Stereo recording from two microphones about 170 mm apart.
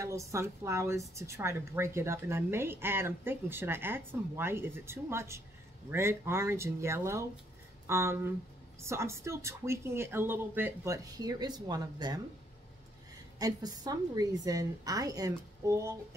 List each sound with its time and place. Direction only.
0.0 s speech: 15° right (ahead or behind)
13.4 s a woman's voice: 20° right (ahead or behind)